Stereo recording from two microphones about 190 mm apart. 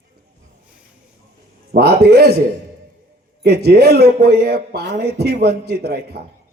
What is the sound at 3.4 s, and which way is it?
Speech, 60° right (ahead or behind).